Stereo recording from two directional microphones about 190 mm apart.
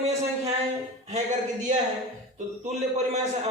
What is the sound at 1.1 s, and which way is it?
Speech, 40° right (ahead or behind).